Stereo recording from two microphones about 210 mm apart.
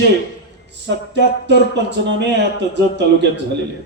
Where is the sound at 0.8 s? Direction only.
55° right (ahead or behind).